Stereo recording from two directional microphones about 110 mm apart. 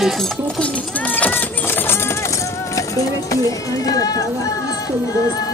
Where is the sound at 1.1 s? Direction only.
15° left (ahead or behind).